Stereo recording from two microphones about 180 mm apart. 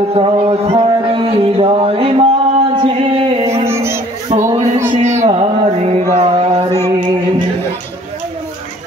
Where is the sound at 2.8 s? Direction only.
30° right (ahead or behind).